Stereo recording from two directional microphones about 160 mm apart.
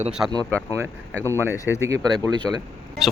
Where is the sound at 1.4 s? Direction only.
15° left (ahead or behind).